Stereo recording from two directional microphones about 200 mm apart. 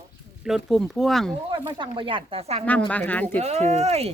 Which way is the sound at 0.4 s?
Centre (ahead or behind).